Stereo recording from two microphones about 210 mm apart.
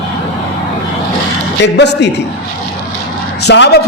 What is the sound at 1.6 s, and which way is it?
Speech, 55° left (ahead or behind).